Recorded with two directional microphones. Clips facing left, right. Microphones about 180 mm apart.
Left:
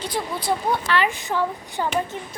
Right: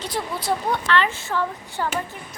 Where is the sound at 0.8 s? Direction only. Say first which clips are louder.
Even; 10° left (ahead or behind).